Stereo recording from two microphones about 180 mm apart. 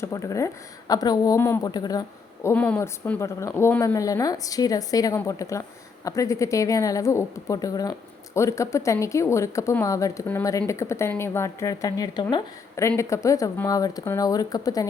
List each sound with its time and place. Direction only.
0.0 s a woman's voice: 15° left (ahead or behind)